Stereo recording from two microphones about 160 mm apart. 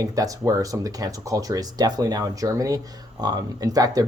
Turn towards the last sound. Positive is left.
turn(degrees=-20)  # may be behind; listen again after turning